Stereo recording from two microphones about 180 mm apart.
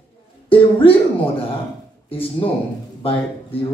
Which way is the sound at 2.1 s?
30° left (ahead or behind).